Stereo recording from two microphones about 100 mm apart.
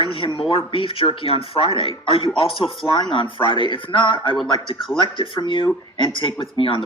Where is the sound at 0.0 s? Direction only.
60° left (ahead or behind).